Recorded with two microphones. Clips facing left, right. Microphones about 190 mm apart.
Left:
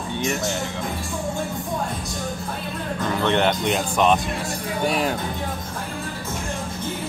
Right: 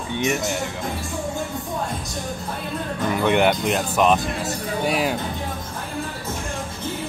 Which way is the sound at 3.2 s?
10° right (ahead or behind).